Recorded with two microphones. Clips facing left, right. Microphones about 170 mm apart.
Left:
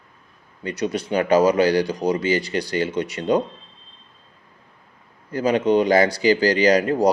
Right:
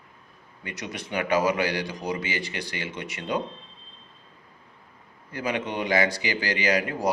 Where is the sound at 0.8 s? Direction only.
35° left (ahead or behind).